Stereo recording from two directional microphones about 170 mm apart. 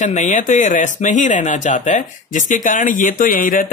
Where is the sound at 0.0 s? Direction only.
45° left (ahead or behind).